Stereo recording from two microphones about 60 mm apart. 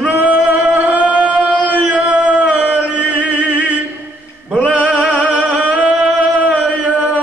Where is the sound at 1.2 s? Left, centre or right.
Right.